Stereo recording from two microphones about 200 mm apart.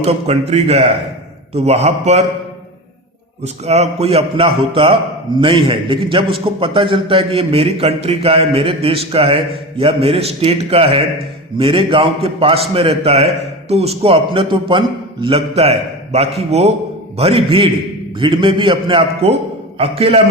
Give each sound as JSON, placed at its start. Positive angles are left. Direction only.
{"t": 0.0, "sound": "a man's voice", "side_deg": -30}
{"t": 3.4, "sound": "a man's voice", "side_deg": -30}